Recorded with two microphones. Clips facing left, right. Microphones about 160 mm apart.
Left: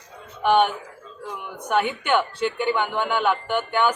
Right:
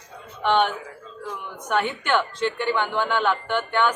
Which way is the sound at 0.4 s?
10° left (ahead or behind).